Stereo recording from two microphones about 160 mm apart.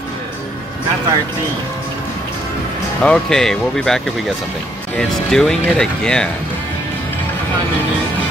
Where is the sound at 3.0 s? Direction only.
5° left (ahead or behind).